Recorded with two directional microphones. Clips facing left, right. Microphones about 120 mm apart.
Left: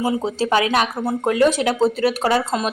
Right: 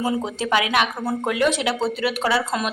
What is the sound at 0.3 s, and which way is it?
A woman's voice, 35° left (ahead or behind).